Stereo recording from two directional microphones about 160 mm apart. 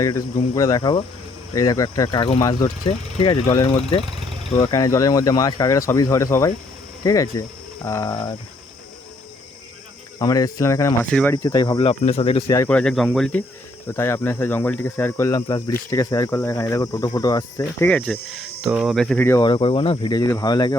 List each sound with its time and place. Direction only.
0.0 s speech: 20° left (ahead or behind)
4.0 s vehicle: 30° right (ahead or behind)
4.5 s speech: 20° left (ahead or behind)
10.2 s speech: 20° left (ahead or behind)
11.1 s speech: 5° left (ahead or behind)
11.4 s speech: 25° left (ahead or behind); by 12.4 s 40° left (ahead or behind)
12.6 s speech: 5° left (ahead or behind)
13.8 s speech: 15° left (ahead or behind)
17.8 s speech: 5° left (ahead or behind)
19.4 s speech: 30° left (ahead or behind)